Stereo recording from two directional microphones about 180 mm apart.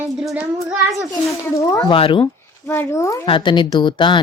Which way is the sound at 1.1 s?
15° left (ahead or behind).